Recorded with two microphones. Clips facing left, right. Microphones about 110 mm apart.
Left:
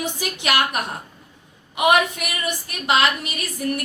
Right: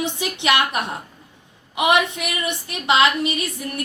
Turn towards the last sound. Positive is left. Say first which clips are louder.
# left 1 dB
turn(degrees=-25)  # may be behind; listen again after turning